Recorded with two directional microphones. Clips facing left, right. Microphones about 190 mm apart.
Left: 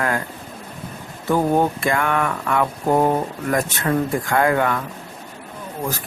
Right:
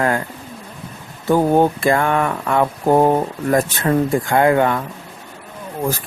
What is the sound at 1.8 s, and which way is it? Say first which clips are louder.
Speech: right 4 dB; 30° right (ahead or behind).